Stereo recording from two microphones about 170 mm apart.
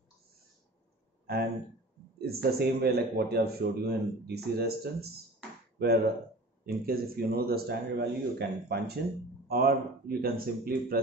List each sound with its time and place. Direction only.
1.2 s a sound: 65° right (ahead or behind)
2.1 s speech: 65° right (ahead or behind)
6.6 s a man's voice: 65° right (ahead or behind)
9.5 s a man's voice: 60° right (ahead or behind)